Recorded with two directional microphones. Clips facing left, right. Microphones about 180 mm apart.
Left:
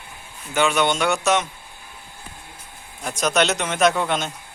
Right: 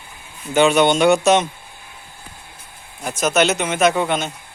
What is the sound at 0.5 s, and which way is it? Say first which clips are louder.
Speech: right 6 dB; 25° right (ahead or behind).